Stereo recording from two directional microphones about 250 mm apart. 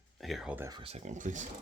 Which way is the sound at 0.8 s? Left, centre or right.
Right.